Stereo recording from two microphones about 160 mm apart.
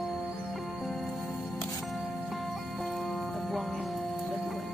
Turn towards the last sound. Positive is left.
turn(degrees=0)  # may be behind; listen again after turning